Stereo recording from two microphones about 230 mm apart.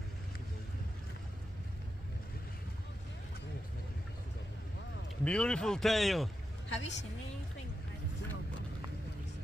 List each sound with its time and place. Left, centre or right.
5.2 s a man's voice: centre
6.7 s a woman's voice: left